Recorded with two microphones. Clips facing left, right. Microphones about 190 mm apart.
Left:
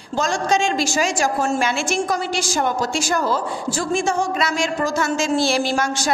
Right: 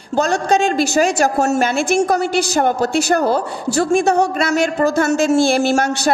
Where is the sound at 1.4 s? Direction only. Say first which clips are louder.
Right 5 dB; 45° right (ahead or behind); by 4.3 s 65° right (ahead or behind).